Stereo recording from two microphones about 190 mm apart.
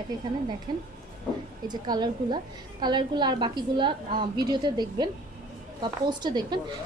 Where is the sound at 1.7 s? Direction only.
20° right (ahead or behind).